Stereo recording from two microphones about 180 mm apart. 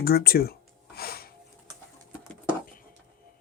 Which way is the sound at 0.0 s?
55° left (ahead or behind).